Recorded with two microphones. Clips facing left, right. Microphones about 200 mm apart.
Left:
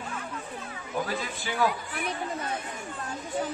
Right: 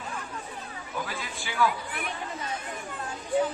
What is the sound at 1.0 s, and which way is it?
Speech, 40° left (ahead or behind).